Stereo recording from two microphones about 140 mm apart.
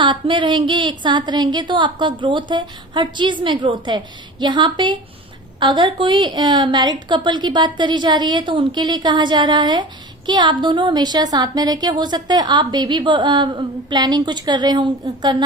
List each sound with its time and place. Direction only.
0.0 s a woman's voice: 35° right (ahead or behind)